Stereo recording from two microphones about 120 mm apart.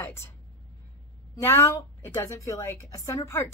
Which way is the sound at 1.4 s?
25° left (ahead or behind).